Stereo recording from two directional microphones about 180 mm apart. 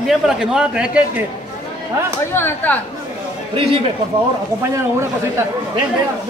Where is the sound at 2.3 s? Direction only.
10° left (ahead or behind).